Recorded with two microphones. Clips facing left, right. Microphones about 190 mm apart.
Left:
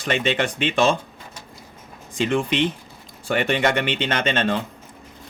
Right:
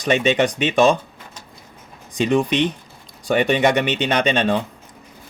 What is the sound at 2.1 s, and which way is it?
Speech, 15° right (ahead or behind).